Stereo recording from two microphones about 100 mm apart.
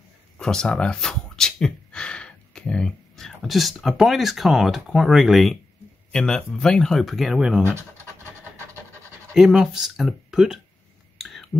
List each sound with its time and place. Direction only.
0.4 s speech: 5° left (ahead or behind)
7.6 s scratch: 25° right (ahead or behind)
9.3 s speech: 5° right (ahead or behind)
11.1 s a sound: centre (ahead or behind)